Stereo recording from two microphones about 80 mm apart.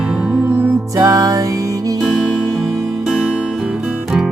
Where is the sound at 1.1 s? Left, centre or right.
Right.